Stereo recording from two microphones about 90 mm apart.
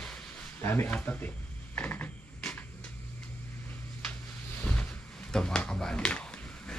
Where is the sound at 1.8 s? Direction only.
15° left (ahead or behind).